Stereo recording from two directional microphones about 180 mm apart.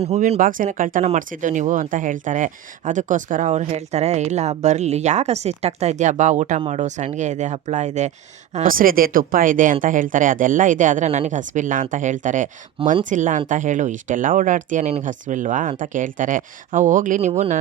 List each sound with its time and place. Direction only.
0.0 s speech: 35° right (ahead or behind)